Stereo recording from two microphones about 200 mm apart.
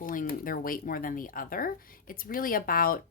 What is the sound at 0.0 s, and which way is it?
Speech, 40° left (ahead or behind).